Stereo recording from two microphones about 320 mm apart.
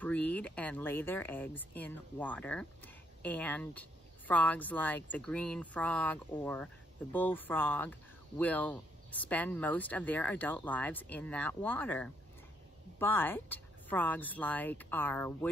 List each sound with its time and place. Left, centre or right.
0.0 s speech: centre